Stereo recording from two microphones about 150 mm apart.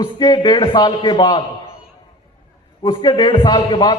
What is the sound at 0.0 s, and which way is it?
A man's voice, 30° left (ahead or behind).